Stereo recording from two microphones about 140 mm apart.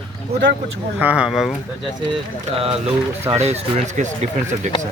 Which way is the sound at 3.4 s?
55° right (ahead or behind).